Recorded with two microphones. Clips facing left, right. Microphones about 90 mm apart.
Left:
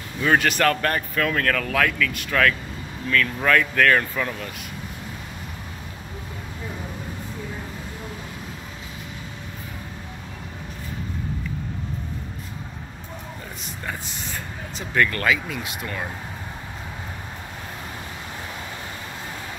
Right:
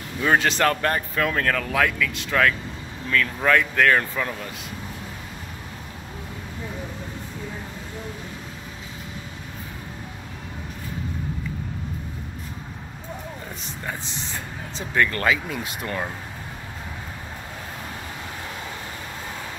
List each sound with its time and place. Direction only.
0.2 s speech: 15° right (ahead or behind)
14.0 s vehicle: 25° right (ahead or behind)